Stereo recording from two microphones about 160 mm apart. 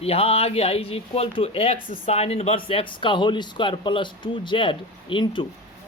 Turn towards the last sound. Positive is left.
turn(degrees=30)  # may be behind; listen again after turning